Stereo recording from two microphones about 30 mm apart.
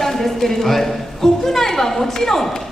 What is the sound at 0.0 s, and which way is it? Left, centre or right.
A woman's voice, centre.